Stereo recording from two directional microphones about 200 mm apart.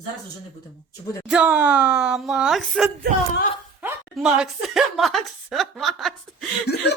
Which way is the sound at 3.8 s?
5° right (ahead or behind).